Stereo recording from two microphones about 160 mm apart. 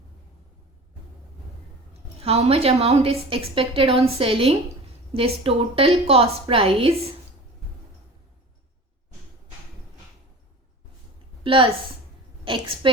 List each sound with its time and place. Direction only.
1.9 s a woman's voice: 40° right (ahead or behind)
11.4 s a woman's voice: 35° right (ahead or behind)
12.8 s a woman's voice: 30° right (ahead or behind)